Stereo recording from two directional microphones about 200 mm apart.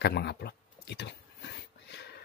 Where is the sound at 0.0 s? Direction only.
55° left (ahead or behind).